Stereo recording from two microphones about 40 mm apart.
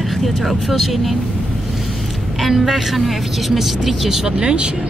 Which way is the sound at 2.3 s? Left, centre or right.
Centre.